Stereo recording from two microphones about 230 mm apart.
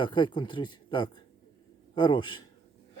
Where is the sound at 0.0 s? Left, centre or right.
Left.